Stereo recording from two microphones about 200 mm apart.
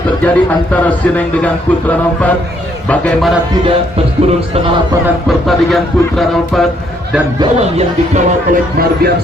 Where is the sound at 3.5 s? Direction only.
30° right (ahead or behind).